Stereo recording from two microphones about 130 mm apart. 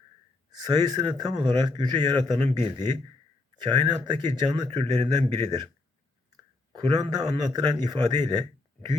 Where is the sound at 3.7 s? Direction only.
35° right (ahead or behind).